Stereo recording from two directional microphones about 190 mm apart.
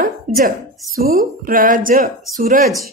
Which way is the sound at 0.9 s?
50° right (ahead or behind).